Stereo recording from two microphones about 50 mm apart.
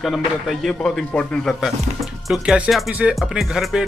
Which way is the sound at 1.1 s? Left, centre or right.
Left.